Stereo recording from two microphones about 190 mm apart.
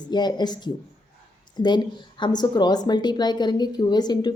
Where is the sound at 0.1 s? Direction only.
20° left (ahead or behind).